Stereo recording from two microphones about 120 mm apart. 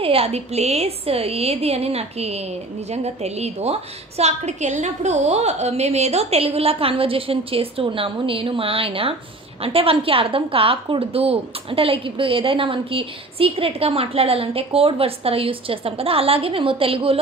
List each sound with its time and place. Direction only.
0.0 s a woman's voice: 55° right (ahead or behind)
4.2 s a woman's voice: 75° right (ahead or behind); by 17.2 s 50° right (ahead or behind)